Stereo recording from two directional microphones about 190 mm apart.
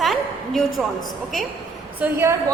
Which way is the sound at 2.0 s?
15° right (ahead or behind).